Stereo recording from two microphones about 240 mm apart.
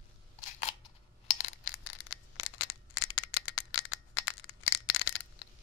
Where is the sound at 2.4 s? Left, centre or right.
Left.